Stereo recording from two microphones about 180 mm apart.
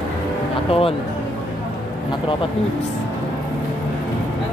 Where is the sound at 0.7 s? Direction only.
30° left (ahead or behind).